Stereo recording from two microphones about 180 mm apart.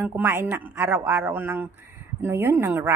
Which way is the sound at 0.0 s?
10° right (ahead or behind).